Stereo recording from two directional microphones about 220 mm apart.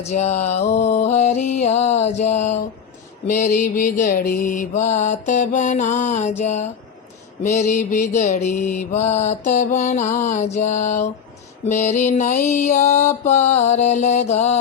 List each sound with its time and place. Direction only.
0.0 s mantra: 30° left (ahead or behind)